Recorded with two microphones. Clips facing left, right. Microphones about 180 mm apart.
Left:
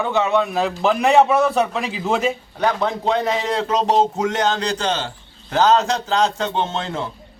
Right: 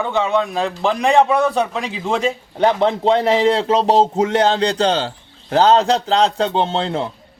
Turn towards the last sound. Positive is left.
turn(degrees=-30)  # may be behind; listen again after turning